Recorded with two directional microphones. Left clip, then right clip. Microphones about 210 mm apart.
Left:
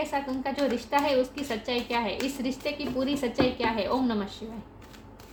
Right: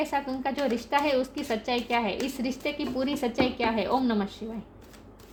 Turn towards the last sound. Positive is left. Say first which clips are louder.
# right 1 dB
turn(degrees=-40)  # may be behind; listen again after turning